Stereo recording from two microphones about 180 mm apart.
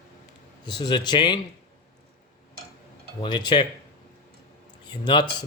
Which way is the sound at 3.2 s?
25° left (ahead or behind).